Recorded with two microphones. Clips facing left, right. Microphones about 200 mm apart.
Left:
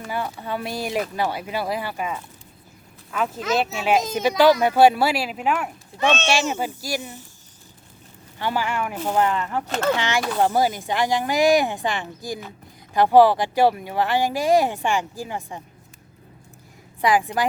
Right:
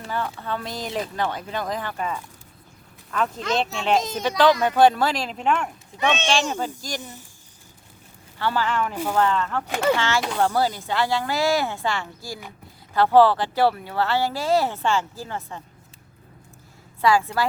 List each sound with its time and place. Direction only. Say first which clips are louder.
0.1 s speech: even; 15° left (ahead or behind)
8.4 s speech: right 1 dB; 15° left (ahead or behind)
9.6 s speech: even; 10° right (ahead or behind)
9.9 s speech: even; 15° left (ahead or behind)
17.0 s speech: even; 15° left (ahead or behind)